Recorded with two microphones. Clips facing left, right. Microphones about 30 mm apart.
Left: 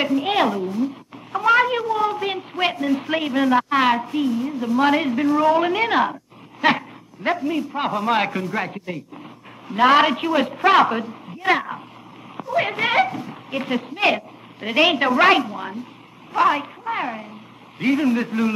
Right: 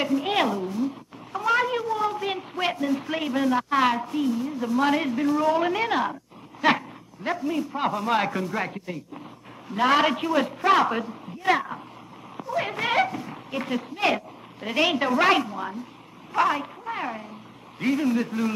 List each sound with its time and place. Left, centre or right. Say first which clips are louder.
0.0 s a sound: left 4 dB; centre
1.3 s speech: left 6 dB; left
8.4 s speech: left 3 dB; centre